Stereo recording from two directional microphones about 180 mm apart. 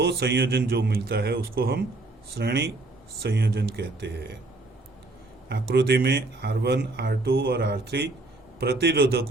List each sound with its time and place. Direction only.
0.0 s speech: 65° right (ahead or behind)
5.5 s speech: 65° right (ahead or behind)